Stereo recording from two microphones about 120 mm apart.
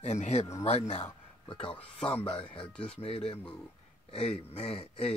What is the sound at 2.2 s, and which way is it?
Speech, 40° left (ahead or behind).